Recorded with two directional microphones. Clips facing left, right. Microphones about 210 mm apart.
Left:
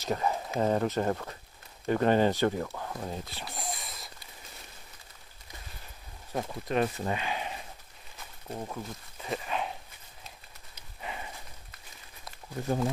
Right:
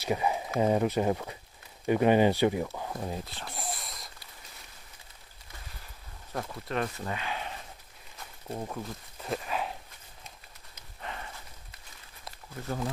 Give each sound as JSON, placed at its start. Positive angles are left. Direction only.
{"t": 0.0, "sound": "a sound", "side_deg": -10}
{"t": 0.6, "sound": "speech", "side_deg": -10}
{"t": 3.3, "sound": "a sound", "side_deg": 0}
{"t": 6.3, "sound": "speech", "side_deg": 20}
{"t": 8.5, "sound": "speech", "side_deg": -5}
{"t": 11.0, "sound": "horse", "side_deg": 10}